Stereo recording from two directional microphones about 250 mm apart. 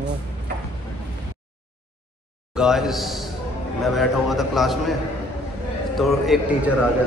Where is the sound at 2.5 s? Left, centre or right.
Centre.